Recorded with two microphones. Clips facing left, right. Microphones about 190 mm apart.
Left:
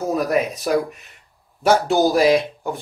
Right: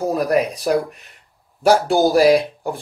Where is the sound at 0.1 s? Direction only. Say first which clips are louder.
Even; centre (ahead or behind).